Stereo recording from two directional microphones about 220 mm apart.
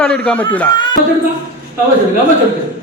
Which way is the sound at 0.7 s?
20° left (ahead or behind).